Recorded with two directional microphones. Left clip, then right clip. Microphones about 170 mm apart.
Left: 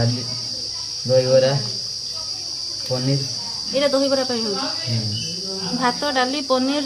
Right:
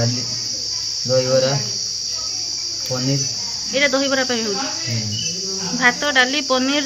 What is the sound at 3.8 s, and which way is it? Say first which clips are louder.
Speech: right 1 dB; centre (ahead or behind).